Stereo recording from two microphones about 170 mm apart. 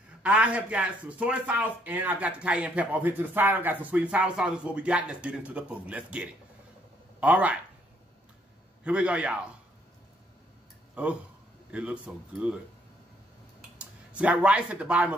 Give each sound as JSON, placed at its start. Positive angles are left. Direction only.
{"t": 0.2, "sound": "a man's voice", "side_deg": -5}
{"t": 8.8, "sound": "a man's voice", "side_deg": -5}
{"t": 11.0, "sound": "a man's voice", "side_deg": -10}
{"t": 13.7, "sound": "speech", "side_deg": -10}